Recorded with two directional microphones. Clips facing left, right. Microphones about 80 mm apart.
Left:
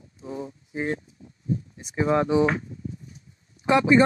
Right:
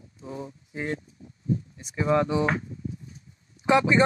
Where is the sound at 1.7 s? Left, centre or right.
Centre.